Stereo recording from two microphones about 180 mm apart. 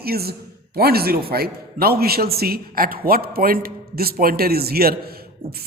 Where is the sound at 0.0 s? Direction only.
60° right (ahead or behind).